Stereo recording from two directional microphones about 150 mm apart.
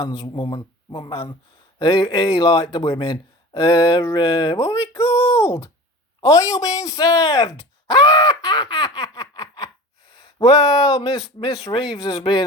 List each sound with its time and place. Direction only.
0.0 s speech: 25° left (ahead or behind)
0.3 s speech: 35° left (ahead or behind)
5.4 s a sound: 20° left (ahead or behind)
6.2 s speech: 20° left (ahead or behind)
7.9 s groan: 25° left (ahead or behind)
8.7 s laughter: 25° left (ahead or behind)
10.1 s speech: 30° left (ahead or behind)